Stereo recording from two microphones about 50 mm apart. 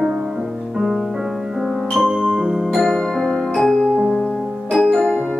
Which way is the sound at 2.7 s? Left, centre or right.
Centre.